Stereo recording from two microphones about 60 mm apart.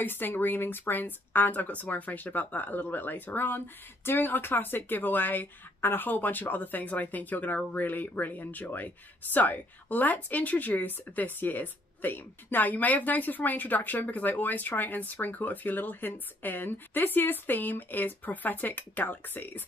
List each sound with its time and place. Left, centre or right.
0.0 s speech: left